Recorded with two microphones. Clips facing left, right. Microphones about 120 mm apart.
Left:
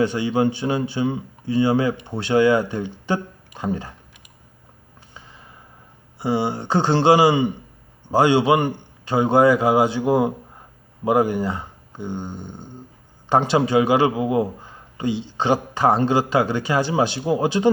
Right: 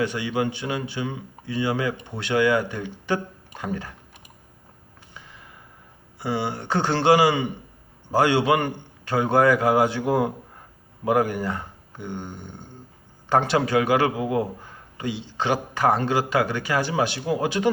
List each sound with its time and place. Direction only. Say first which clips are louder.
0.0 s a man's voice: left 5 dB; 30° left (ahead or behind)
5.1 s a sound: left 1 dB; 25° left (ahead or behind)
6.1 s a man's voice: left 5 dB; 25° left (ahead or behind)